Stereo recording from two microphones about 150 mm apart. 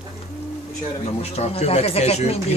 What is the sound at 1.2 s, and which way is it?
Speech, 45° left (ahead or behind).